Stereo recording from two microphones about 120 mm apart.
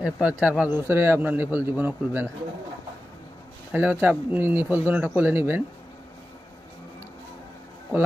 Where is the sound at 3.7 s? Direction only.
15° right (ahead or behind).